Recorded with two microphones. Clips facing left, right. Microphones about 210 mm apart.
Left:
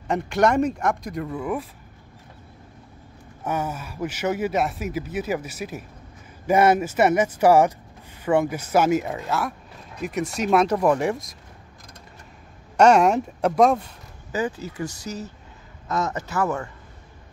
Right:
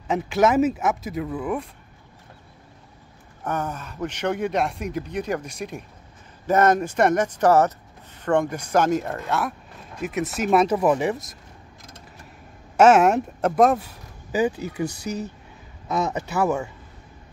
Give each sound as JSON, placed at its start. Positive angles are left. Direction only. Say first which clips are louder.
{"t": 0.1, "sound": "speech", "louder": "right 1 dB", "side_deg": 0}
{"t": 3.4, "sound": "speech", "louder": "left 1 dB", "side_deg": 10}
{"t": 12.7, "sound": "speech", "louder": "right 1 dB", "side_deg": -5}
{"t": 14.9, "sound": "speech", "louder": "right 4 dB", "side_deg": -60}
{"t": 16.0, "sound": "speech", "louder": "right 2 dB", "side_deg": -15}